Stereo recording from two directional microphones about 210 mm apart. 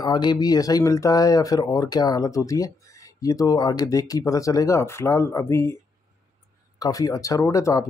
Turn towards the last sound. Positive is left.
turn(degrees=15)  # may be behind; listen again after turning